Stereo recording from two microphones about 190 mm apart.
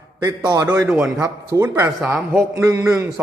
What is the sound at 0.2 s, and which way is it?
Speech, 20° right (ahead or behind).